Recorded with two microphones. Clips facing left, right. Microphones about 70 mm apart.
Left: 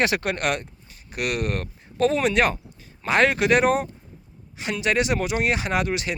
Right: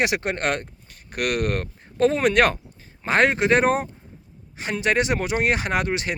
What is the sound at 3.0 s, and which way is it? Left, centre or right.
Speech, right.